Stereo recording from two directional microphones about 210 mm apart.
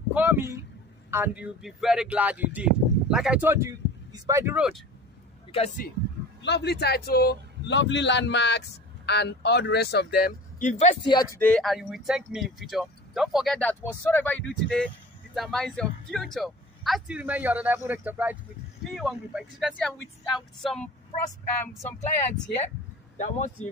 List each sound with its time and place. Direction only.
0.1 s a sound: 10° right (ahead or behind)
1.1 s speech: 10° right (ahead or behind)
5.5 s a man's voice: 30° left (ahead or behind)
6.4 s a man's voice: 55° left (ahead or behind); by 11.0 s 35° left (ahead or behind)
11.1 s a man's voice: 20° left (ahead or behind)
11.4 s speech: 5° left (ahead or behind)
23.1 s speech: 35° left (ahead or behind)